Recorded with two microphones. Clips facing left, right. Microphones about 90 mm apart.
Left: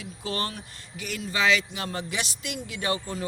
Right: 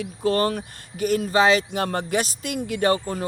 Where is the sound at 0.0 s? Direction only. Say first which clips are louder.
Right 10 dB; 50° right (ahead or behind).